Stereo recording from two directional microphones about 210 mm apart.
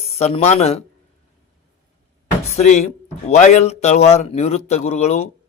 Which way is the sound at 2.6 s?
35° left (ahead or behind).